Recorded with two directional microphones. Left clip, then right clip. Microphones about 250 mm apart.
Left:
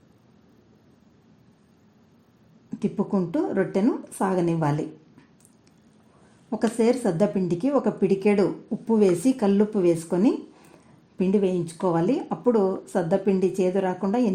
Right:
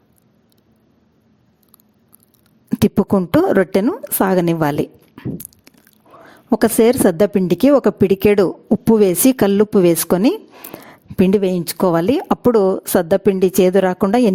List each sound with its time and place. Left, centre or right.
2.6 s a woman's voice: right